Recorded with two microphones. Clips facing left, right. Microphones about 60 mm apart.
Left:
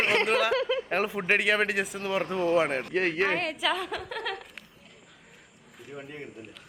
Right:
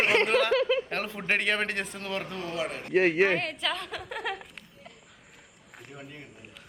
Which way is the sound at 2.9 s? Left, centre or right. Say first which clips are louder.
Right 8 dB; centre.